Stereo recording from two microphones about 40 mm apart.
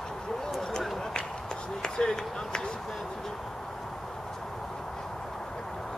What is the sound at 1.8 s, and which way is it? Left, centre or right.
Run, centre.